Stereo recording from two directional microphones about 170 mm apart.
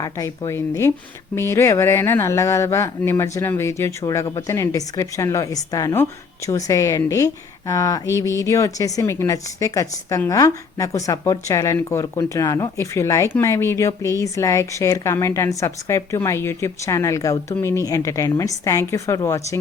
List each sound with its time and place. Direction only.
0.0 s a woman's voice: 20° left (ahead or behind)